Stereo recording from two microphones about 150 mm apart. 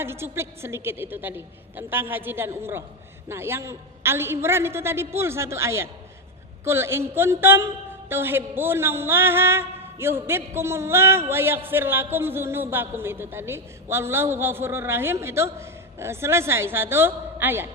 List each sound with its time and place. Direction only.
0.0 s a man's voice: 15° right (ahead or behind)